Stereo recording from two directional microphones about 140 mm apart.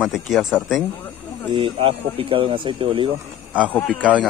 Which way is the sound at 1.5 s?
40° right (ahead or behind).